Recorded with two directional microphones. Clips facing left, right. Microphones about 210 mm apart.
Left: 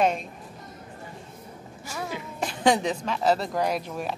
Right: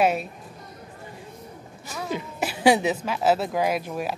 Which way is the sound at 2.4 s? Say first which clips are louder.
Right 3 dB; 5° right (ahead or behind).